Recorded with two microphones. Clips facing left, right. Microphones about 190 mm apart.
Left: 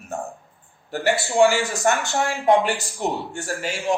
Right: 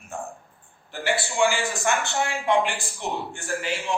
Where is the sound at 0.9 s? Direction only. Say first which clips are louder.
Left 5 dB; 45° left (ahead or behind).